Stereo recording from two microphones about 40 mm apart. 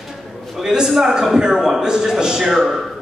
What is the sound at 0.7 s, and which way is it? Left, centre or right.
A man's voice, centre.